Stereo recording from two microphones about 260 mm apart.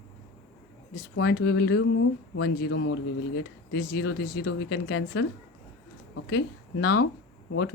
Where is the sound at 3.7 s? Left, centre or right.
Left.